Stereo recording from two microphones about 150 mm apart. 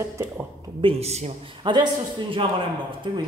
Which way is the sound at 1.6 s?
30° right (ahead or behind).